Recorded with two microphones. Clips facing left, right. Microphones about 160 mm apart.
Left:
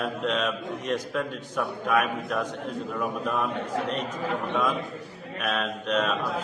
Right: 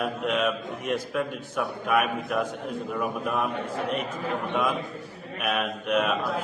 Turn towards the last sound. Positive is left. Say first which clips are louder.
# right 1 dB
turn(degrees=-10)  # may be behind; listen again after turning